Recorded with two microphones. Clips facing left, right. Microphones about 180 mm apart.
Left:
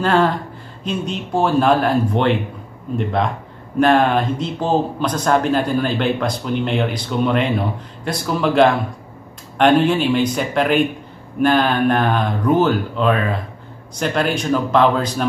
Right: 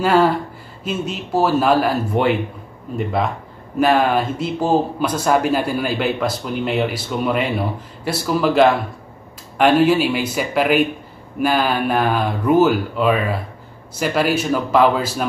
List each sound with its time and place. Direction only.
0.0 s speech: 10° right (ahead or behind)